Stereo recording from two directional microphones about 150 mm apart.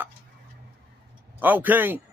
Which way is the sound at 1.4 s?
10° right (ahead or behind).